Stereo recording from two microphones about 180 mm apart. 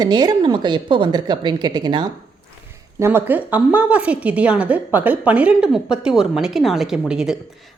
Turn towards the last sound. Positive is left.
turn(degrees=-5)  # may be behind; listen again after turning